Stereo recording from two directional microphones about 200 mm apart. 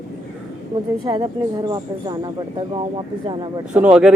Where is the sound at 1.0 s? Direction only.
20° right (ahead or behind).